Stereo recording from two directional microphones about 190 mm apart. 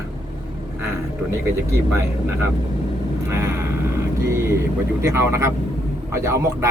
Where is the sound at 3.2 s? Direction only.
15° right (ahead or behind).